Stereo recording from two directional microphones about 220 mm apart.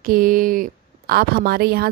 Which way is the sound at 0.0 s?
40° right (ahead or behind).